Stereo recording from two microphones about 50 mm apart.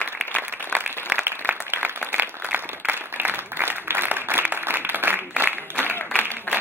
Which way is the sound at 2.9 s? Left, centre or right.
Right.